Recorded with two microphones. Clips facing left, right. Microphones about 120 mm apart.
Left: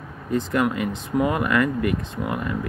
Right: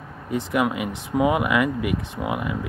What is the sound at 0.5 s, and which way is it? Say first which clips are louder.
Speech: right 1 dB; 15° right (ahead or behind).